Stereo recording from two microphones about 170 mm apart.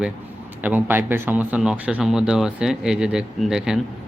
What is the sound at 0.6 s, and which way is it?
Speech, 10° right (ahead or behind).